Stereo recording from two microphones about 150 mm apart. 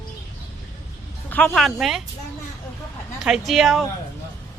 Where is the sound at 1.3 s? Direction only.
5° left (ahead or behind).